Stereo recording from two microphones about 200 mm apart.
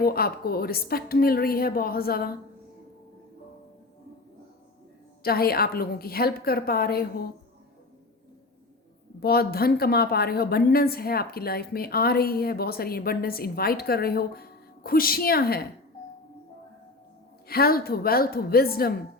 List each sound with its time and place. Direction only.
0.0 s a woman's voice: 50° left (ahead or behind)
5.2 s a woman's voice: 50° left (ahead or behind)
9.2 s a woman's voice: 50° left (ahead or behind)
17.5 s a woman's voice: 50° left (ahead or behind)